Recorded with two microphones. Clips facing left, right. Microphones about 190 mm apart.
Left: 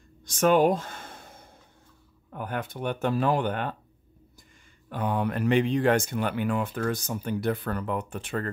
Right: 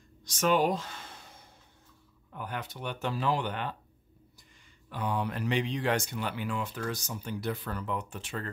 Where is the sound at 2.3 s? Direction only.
50° left (ahead or behind).